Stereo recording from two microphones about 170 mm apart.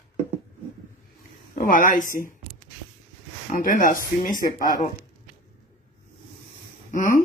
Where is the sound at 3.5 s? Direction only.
50° left (ahead or behind).